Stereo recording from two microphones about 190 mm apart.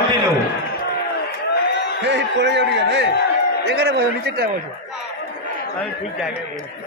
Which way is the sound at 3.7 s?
60° right (ahead or behind).